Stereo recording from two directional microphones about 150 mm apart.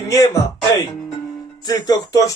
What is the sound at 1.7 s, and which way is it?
Speech, 25° left (ahead or behind).